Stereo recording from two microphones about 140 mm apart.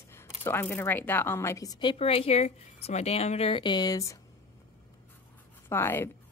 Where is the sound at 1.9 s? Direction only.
45° left (ahead or behind); by 4.2 s 25° left (ahead or behind).